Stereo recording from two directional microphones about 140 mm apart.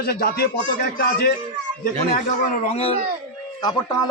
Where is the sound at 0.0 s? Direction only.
90° left.